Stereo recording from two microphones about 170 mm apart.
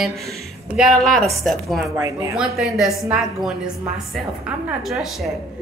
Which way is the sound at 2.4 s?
Centre (ahead or behind).